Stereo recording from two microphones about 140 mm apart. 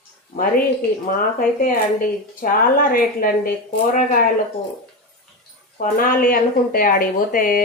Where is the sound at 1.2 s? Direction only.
85° left.